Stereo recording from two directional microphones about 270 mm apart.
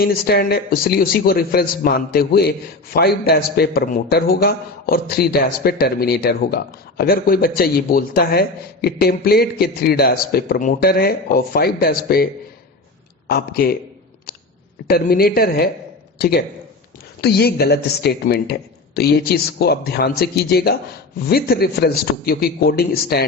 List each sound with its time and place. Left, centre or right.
0.0 s a man's voice: left
14.8 s a man's voice: left